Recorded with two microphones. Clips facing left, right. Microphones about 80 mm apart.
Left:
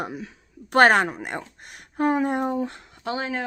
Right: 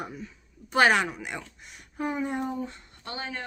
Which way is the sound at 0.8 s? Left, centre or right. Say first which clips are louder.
Left 5 dB; left.